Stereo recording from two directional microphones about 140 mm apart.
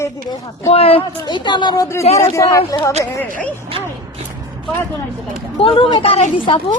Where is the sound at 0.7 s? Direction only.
45° left (ahead or behind); by 2.9 s 25° left (ahead or behind).